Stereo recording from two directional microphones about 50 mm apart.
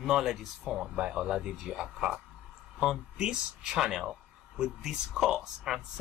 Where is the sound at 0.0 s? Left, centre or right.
Centre.